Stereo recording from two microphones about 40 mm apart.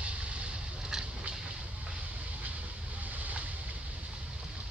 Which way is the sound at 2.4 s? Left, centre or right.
Right.